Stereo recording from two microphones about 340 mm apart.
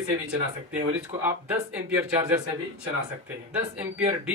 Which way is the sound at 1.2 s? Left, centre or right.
Centre.